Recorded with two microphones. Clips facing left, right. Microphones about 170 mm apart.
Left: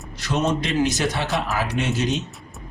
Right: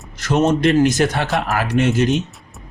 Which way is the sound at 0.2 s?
50° right (ahead or behind).